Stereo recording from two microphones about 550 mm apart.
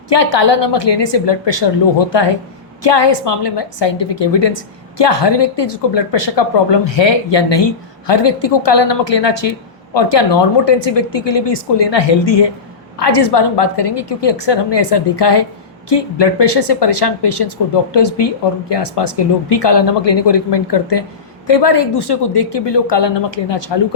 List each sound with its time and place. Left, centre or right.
0.1 s a woman's voice: left